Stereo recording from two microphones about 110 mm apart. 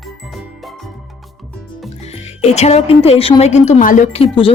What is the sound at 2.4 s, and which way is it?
A woman's voice, 85° left.